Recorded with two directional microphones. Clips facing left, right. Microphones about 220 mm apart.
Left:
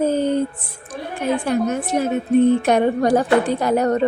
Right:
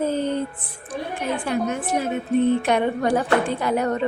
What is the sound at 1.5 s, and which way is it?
A woman's voice, 40° left (ahead or behind).